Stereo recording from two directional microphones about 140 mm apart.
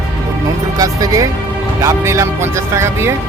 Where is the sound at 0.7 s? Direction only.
25° right (ahead or behind).